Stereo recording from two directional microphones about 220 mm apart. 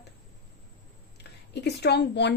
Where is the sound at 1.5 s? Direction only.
50° left (ahead or behind).